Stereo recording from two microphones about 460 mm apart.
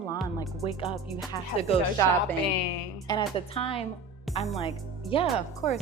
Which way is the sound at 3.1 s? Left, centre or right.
Centre.